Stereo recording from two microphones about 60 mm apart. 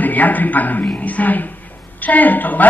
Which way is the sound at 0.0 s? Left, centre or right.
Left.